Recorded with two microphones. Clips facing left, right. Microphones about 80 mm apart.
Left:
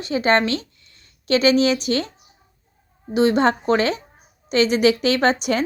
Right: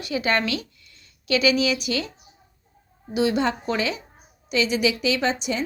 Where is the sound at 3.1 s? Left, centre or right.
Left.